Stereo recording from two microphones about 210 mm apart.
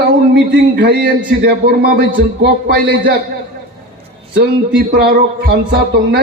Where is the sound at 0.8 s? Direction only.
45° right (ahead or behind).